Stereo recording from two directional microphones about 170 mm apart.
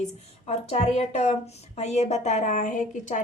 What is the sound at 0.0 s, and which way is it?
A woman's voice, 40° left (ahead or behind).